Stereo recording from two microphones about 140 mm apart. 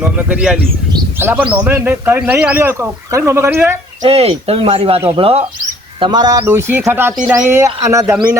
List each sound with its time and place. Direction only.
0.0 s a man's voice: 10° right (ahead or behind)
4.0 s speech: 45° right (ahead or behind)
6.0 s speech: 30° right (ahead or behind)
6.4 s a man's voice: 15° right (ahead or behind)
8.1 s a man's voice: 10° right (ahead or behind)